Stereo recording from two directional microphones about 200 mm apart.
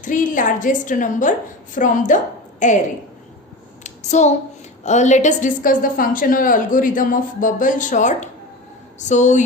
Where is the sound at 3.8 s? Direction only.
35° left (ahead or behind).